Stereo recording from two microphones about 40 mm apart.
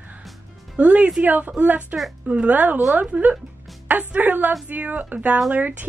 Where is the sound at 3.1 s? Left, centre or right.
Right.